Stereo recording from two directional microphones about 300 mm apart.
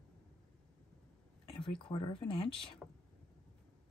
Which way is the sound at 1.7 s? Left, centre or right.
Centre.